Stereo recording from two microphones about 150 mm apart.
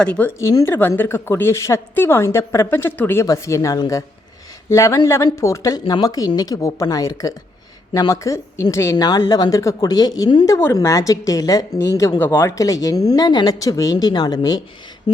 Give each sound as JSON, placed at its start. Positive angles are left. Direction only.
{"t": 0.0, "sound": "a woman's voice", "side_deg": 10}
{"t": 0.3, "sound": "a woman's voice", "side_deg": 20}